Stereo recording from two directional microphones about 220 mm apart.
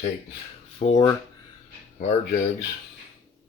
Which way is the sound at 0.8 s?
30° left (ahead or behind).